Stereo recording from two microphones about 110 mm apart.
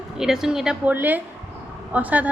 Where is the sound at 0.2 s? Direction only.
5° right (ahead or behind).